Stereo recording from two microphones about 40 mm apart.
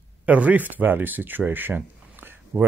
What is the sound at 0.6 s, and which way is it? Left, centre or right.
Speech, right.